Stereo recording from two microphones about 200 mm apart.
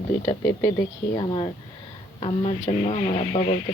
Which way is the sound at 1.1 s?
25° left (ahead or behind).